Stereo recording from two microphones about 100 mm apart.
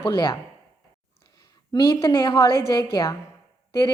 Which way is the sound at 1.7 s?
45° left (ahead or behind).